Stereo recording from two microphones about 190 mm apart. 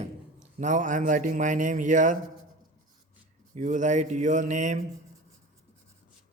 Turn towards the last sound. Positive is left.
turn(degrees=-40)  # may be behind; listen again after turning